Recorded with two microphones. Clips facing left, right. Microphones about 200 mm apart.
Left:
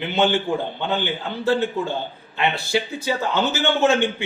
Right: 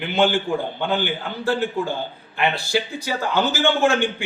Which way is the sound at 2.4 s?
25° left (ahead or behind).